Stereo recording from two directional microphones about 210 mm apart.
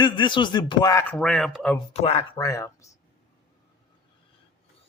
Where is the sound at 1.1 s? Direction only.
Centre (ahead or behind).